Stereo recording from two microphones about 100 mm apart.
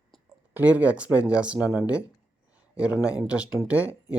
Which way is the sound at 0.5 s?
15° right (ahead or behind).